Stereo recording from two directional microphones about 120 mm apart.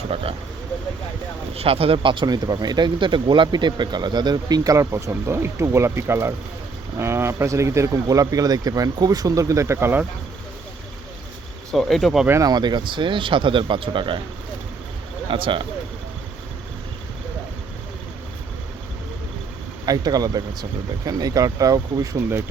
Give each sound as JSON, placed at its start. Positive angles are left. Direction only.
{"t": 0.1, "sound": "speech", "side_deg": -50}
{"t": 1.5, "sound": "speech", "side_deg": -55}
{"t": 11.7, "sound": "speech", "side_deg": 0}
{"t": 12.3, "sound": "speech", "side_deg": -30}
{"t": 15.3, "sound": "speech", "side_deg": -45}
{"t": 19.8, "sound": "speech", "side_deg": -30}